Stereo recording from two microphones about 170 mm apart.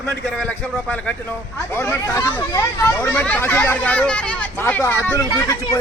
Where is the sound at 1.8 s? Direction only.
15° left (ahead or behind).